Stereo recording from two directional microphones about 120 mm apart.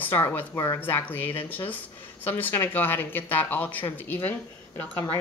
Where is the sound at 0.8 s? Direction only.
15° left (ahead or behind).